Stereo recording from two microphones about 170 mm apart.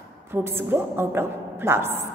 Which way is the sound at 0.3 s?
15° right (ahead or behind).